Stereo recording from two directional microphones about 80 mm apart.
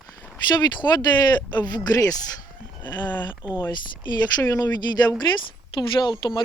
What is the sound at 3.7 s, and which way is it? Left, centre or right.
Speech, left.